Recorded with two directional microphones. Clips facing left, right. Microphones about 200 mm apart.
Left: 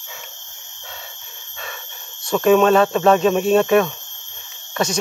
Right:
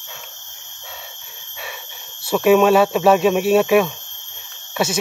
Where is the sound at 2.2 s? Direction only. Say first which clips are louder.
Right 1 dB; 5° right (ahead or behind).